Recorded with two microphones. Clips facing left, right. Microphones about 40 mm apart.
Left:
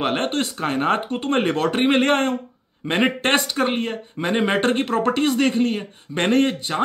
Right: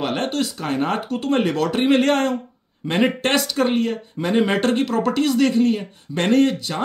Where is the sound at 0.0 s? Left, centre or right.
Left.